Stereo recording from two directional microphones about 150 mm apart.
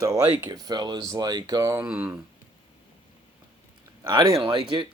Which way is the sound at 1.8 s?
10° right (ahead or behind).